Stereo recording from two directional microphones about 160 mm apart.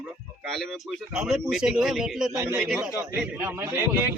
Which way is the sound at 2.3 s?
15° right (ahead or behind).